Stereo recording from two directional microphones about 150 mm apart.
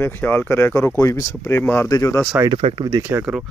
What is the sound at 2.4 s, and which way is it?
Speech, 35° right (ahead or behind).